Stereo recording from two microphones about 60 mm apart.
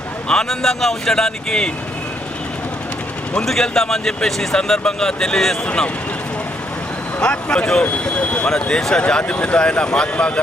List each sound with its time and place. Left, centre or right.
0.3 s speech: centre
3.3 s speech: centre
7.2 s speech: centre